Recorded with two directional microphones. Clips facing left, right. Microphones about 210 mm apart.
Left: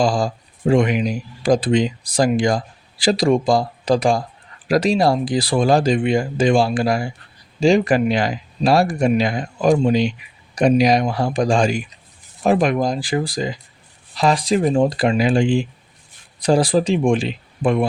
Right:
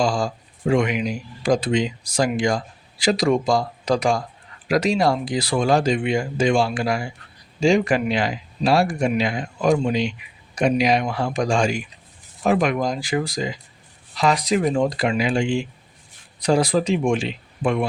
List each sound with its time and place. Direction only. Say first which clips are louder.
0.0 s speech: left 3 dB; 35° left (ahead or behind)